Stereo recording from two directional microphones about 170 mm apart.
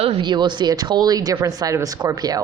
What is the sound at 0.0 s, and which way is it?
Speech, 25° right (ahead or behind).